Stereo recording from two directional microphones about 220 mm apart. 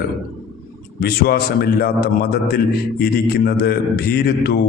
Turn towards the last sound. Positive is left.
turn(degrees=45)  # may be behind; listen again after turning